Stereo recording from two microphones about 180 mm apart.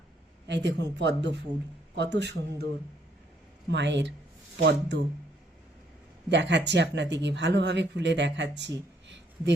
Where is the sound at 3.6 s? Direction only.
75° right (ahead or behind).